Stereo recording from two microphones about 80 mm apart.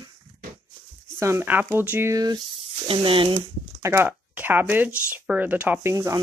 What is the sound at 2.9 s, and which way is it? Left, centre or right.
Speech, right.